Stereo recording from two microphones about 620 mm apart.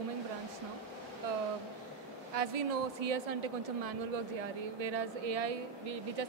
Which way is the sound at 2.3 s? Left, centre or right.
Right.